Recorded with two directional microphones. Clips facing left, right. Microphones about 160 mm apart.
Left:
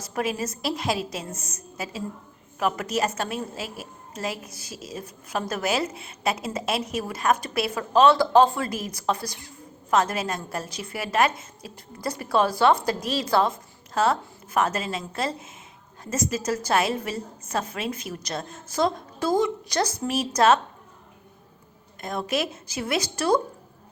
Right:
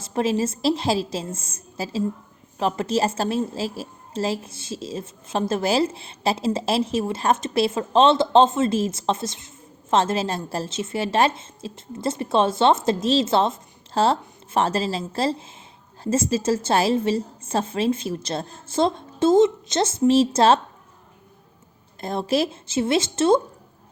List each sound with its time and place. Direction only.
0.0 s a woman's voice: 25° right (ahead or behind)
22.0 s a woman's voice: 30° right (ahead or behind)